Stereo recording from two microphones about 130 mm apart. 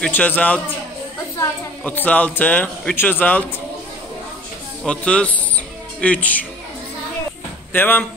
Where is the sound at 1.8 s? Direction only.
10° left (ahead or behind).